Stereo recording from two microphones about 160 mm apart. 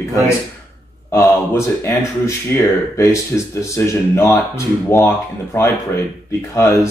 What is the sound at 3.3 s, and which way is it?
Speech, 10° left (ahead or behind).